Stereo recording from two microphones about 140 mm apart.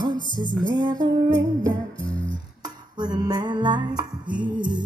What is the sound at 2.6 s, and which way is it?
Music, 30° right (ahead or behind).